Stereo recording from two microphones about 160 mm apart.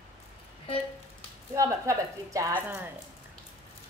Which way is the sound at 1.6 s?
20° right (ahead or behind).